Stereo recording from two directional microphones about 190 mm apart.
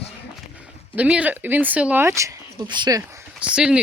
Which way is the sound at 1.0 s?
5° right (ahead or behind).